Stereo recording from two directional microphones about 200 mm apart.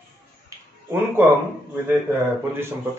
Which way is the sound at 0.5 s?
15° right (ahead or behind).